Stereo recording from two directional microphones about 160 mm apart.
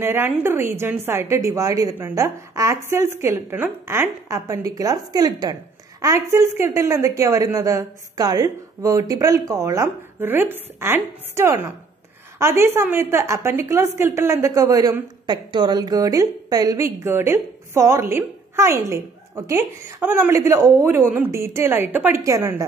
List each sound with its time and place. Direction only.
0.0 s a woman's voice: 15° right (ahead or behind)